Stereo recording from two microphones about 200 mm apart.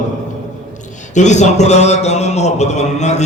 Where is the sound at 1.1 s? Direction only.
35° left (ahead or behind).